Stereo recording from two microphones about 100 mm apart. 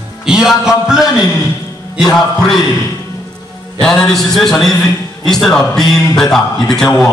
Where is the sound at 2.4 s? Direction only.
5° left (ahead or behind).